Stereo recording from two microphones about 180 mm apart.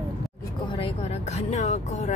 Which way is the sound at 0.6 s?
30° left (ahead or behind).